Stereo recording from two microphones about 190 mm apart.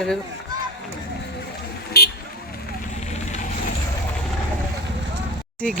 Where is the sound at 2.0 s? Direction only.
55° left (ahead or behind).